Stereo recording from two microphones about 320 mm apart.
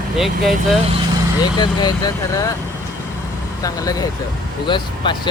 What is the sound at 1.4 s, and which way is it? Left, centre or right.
Speech, centre.